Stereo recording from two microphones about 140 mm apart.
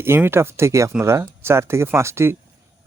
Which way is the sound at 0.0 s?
15° right (ahead or behind).